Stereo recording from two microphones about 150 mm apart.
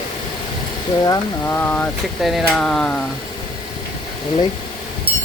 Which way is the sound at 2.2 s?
Centre (ahead or behind).